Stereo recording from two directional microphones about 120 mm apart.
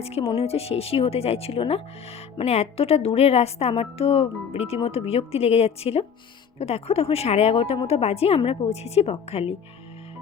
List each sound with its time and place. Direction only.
0.0 s speech: 55° left (ahead or behind)